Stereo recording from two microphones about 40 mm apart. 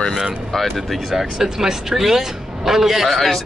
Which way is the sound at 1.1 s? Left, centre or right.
Centre.